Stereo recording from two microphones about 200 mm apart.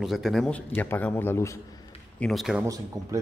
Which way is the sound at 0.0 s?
Centre (ahead or behind).